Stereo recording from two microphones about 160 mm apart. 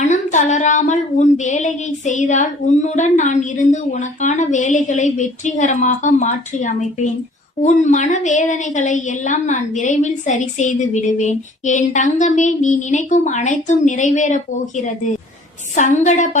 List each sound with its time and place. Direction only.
0.0 s a woman's voice: 50° left (ahead or behind)